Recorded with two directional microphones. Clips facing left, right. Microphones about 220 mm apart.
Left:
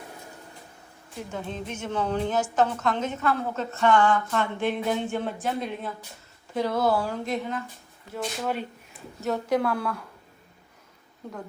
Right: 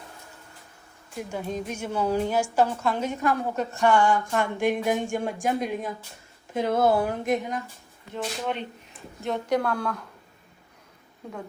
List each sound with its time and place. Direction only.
1.3 s a woman's voice: 10° right (ahead or behind)
8.1 s speech: 5° left (ahead or behind)
11.2 s speech: centre (ahead or behind)